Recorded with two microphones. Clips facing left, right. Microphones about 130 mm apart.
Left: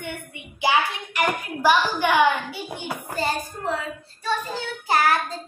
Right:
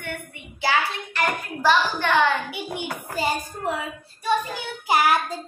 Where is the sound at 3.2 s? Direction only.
15° right (ahead or behind).